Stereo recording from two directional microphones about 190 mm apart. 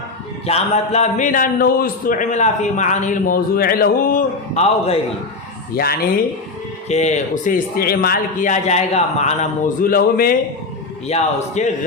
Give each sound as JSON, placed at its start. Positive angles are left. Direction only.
{"t": 0.4, "sound": "a man's voice", "side_deg": 35}
{"t": 5.7, "sound": "speech", "side_deg": 55}
{"t": 6.8, "sound": "speech", "side_deg": 35}
{"t": 11.1, "sound": "speech", "side_deg": 40}